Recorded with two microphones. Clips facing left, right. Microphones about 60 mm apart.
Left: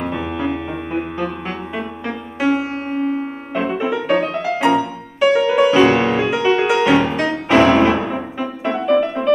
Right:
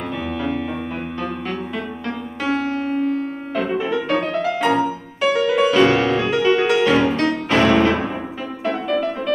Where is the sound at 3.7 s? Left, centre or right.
Centre.